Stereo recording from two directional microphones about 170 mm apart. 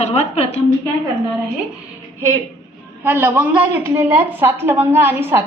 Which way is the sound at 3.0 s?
15° right (ahead or behind).